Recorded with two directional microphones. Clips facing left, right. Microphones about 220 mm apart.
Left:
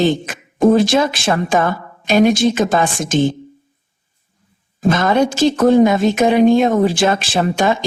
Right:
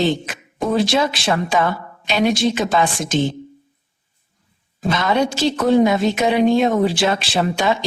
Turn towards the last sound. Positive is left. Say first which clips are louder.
# left 3 dB
turn(degrees=50)  # may be behind; listen again after turning